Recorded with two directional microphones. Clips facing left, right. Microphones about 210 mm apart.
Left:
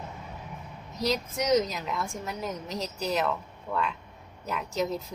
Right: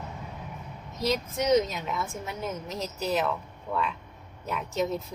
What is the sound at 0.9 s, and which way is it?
Speech, centre (ahead or behind).